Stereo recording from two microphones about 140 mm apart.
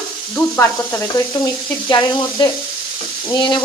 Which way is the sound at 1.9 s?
30° left (ahead or behind).